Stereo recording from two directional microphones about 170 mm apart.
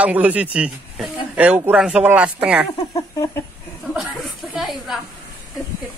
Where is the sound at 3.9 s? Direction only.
Centre (ahead or behind).